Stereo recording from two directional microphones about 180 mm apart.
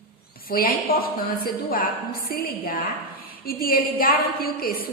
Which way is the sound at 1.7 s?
55° left (ahead or behind).